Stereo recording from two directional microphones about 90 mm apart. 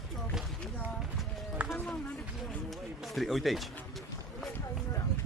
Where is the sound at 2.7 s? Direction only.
Centre (ahead or behind).